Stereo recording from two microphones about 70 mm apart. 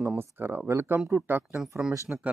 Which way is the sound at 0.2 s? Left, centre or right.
Right.